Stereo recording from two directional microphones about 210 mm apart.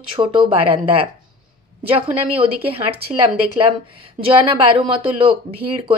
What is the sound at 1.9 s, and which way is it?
Speech, 25° right (ahead or behind).